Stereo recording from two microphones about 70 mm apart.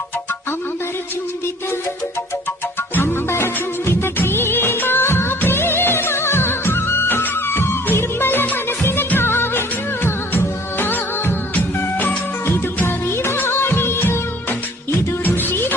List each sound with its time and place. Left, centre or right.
2.9 s music: left
15.2 s music: left